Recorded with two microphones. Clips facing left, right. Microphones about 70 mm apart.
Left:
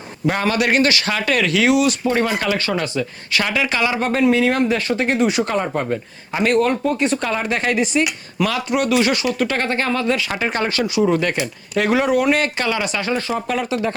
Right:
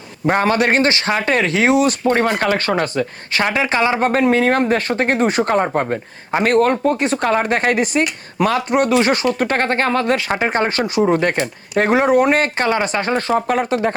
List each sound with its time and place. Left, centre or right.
0.3 s speech: right
3.4 s speech: right